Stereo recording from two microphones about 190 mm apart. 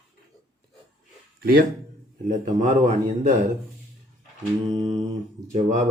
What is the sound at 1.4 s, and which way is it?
Speech, 50° right (ahead or behind).